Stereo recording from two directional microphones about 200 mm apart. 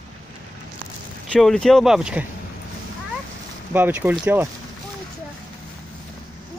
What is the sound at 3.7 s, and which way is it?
Speech, 10° right (ahead or behind).